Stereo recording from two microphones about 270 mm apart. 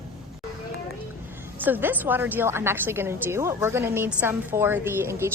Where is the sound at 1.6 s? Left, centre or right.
Centre.